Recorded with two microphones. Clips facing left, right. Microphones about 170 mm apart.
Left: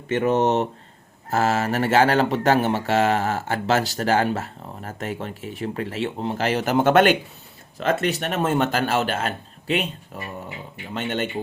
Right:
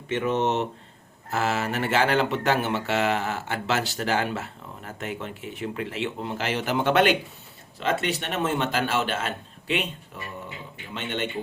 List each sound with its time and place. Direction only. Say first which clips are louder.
0.1 s a man's voice: left 5 dB; 40° left (ahead or behind)